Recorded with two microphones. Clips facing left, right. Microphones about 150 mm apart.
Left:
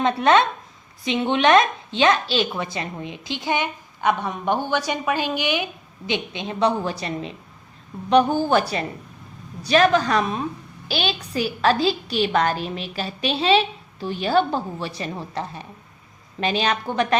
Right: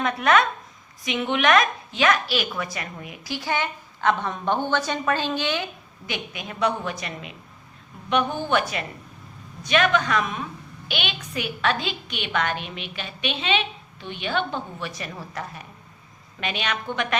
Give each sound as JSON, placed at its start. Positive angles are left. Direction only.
{"t": 0.0, "sound": "a woman's voice", "side_deg": 30}